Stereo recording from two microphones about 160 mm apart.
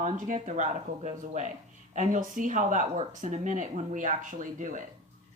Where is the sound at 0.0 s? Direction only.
50° right (ahead or behind).